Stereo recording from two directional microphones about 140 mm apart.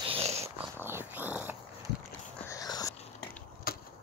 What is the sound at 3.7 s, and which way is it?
Chop, 90° left.